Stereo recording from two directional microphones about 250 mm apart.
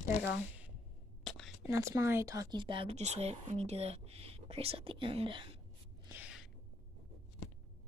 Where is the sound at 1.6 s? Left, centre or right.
Centre.